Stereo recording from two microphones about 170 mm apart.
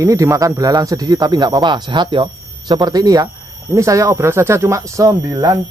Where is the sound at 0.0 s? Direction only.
20° right (ahead or behind).